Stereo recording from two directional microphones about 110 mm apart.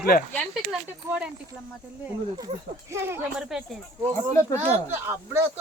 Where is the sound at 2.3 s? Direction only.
30° right (ahead or behind).